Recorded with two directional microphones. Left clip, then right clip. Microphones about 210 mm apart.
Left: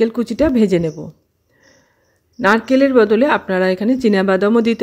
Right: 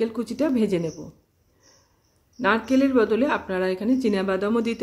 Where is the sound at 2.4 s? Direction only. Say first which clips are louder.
Left 8 dB; 30° left (ahead or behind).